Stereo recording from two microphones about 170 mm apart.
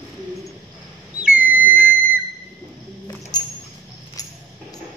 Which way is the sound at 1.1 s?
10° right (ahead or behind).